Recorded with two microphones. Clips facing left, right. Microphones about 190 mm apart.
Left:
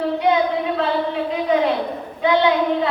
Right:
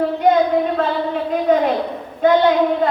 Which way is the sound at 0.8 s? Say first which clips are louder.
Right 1 dB; 50° right (ahead or behind).